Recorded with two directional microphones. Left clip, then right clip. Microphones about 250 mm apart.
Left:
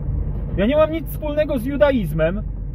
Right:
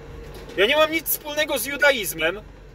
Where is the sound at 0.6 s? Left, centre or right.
Centre.